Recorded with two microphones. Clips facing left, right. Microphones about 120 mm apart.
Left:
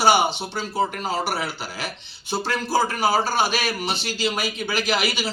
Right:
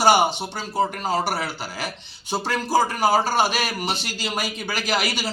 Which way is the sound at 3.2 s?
45° right (ahead or behind).